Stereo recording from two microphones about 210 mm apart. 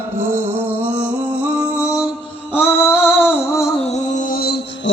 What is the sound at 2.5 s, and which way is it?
Music, 10° left (ahead or behind).